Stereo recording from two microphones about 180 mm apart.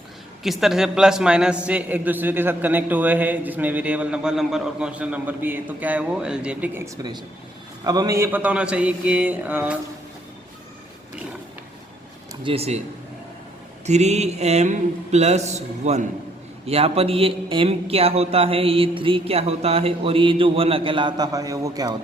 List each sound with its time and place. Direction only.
0.4 s a man's voice: centre (ahead or behind)
12.4 s a man's voice: 30° right (ahead or behind)
13.8 s a man's voice: 40° right (ahead or behind); by 21.9 s 20° right (ahead or behind)